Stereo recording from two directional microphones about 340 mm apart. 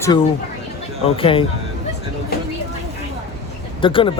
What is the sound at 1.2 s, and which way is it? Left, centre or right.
Speech, centre.